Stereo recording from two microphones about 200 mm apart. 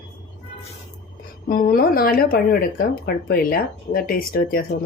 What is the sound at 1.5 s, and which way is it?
Speech, 45° left (ahead or behind).